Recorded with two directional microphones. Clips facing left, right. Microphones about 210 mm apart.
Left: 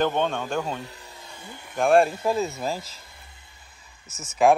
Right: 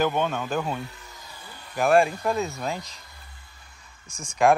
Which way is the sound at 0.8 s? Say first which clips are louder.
Left 1 dB; 30° left (ahead or behind).